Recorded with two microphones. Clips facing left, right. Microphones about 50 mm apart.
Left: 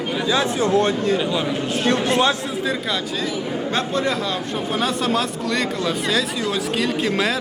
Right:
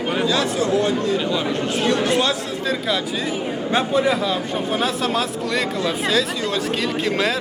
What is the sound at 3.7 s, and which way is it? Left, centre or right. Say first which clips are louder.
A man's voice: right 4 dB; centre.